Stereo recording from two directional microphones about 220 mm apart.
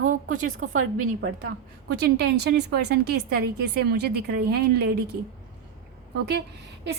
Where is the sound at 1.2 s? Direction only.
50° right (ahead or behind).